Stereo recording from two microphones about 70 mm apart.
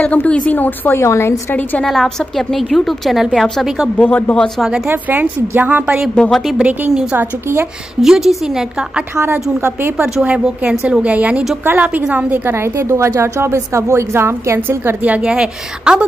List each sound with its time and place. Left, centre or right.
0.0 s a woman's voice: left
0.9 s a woman's voice: left
1.9 s a woman's voice: centre
4.0 s a woman's voice: left
4.6 s a woman's voice: centre
4.8 s a woman's voice: right
6.2 s a woman's voice: centre
6.9 s a woman's voice: centre
9.1 s a woman's voice: right
10.1 s a woman's voice: centre
12.7 s a woman's voice: right
15.0 s a woman's voice: centre